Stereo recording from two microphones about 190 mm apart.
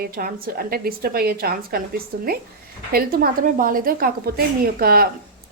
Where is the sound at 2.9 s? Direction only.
50° right (ahead or behind).